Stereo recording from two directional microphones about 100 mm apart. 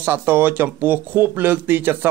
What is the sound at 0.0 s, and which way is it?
Speech, 20° right (ahead or behind).